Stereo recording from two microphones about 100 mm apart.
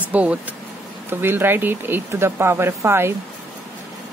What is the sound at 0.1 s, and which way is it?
Speech, 15° right (ahead or behind).